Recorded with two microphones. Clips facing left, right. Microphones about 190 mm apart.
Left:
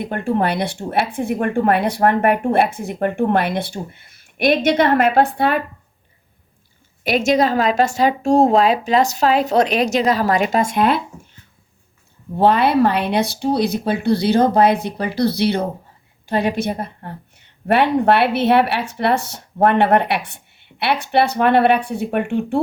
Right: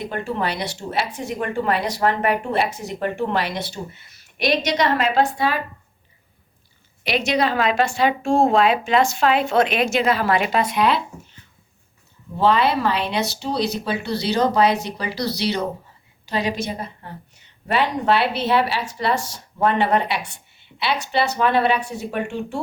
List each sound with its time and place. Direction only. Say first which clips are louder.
0.0 s a woman's voice: left 5 dB; 55° left (ahead or behind)
7.0 s a woman's voice: left 5 dB; 45° left (ahead or behind)
12.4 s a woman's voice: left 4 dB; 55° left (ahead or behind)